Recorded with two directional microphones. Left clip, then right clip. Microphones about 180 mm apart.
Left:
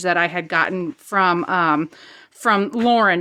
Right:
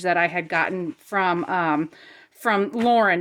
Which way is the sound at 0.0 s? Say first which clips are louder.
Left 2 dB; 15° left (ahead or behind).